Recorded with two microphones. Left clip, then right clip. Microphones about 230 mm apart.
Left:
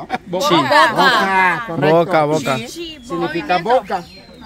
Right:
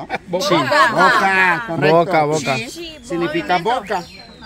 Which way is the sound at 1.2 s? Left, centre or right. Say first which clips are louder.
Even; centre.